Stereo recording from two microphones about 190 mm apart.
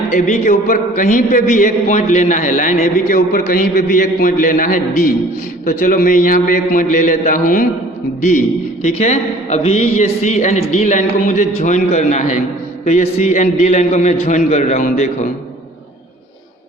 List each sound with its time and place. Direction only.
0.1 s a man's voice: 40° left (ahead or behind)
8.8 s a man's voice: 40° left (ahead or behind)